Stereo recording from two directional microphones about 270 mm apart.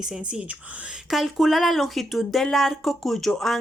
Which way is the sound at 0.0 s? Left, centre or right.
Centre.